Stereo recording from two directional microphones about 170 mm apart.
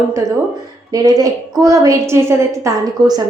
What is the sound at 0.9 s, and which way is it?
A woman's voice, 20° right (ahead or behind).